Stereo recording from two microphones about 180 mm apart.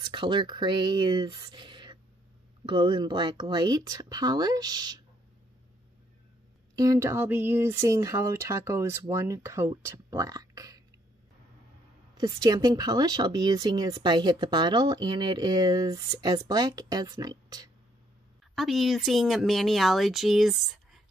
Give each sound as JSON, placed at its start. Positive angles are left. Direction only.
{"t": 0.0, "sound": "speech", "side_deg": -25}
{"t": 6.7, "sound": "speech", "side_deg": -20}
{"t": 12.2, "sound": "speech", "side_deg": -20}
{"t": 18.5, "sound": "speech", "side_deg": 0}